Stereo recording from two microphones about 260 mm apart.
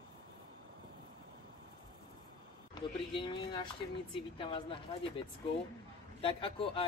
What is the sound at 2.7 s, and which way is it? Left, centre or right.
A man's voice, centre.